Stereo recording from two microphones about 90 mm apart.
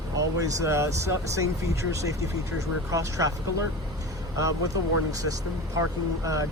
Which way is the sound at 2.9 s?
40° right (ahead or behind).